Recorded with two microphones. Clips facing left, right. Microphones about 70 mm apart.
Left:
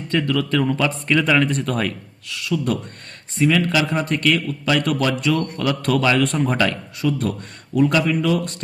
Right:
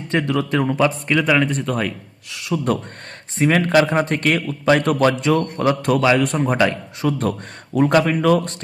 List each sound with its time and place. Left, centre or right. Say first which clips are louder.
0.1 s speech: right 1 dB; right
0.9 s speech: right 1 dB; centre
2.3 s speech: even; right
3.3 s a man's voice: right 3 dB; right; by 6.7 s centre
6.7 s a man's voice: right 1 dB; right